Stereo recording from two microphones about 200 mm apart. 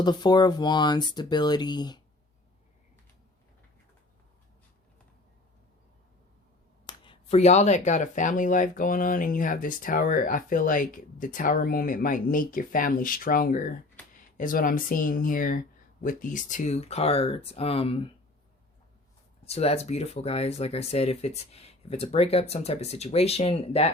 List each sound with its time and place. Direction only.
0.0 s speech: 20° left (ahead or behind)
6.8 s speech: 25° left (ahead or behind)
19.5 s speech: 30° left (ahead or behind)